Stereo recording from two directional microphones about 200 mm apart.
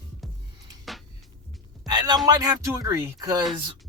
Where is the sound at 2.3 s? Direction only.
15° right (ahead or behind).